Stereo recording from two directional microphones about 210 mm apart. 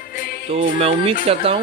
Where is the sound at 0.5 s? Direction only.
25° right (ahead or behind).